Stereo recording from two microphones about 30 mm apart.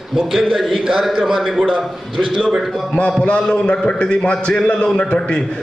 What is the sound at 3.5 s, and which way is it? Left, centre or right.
A man's voice, left.